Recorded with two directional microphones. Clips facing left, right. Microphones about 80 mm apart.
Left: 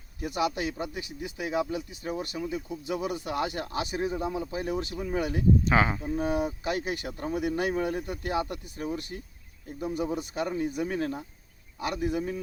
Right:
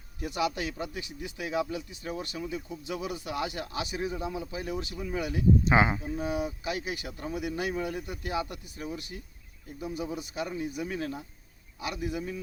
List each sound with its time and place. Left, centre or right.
0.2 s speech: left
5.6 s speech: centre
6.0 s speech: left
10.3 s speech: left